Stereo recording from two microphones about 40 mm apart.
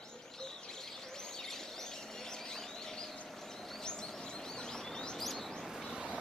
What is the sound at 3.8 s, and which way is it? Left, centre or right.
Chirp, centre.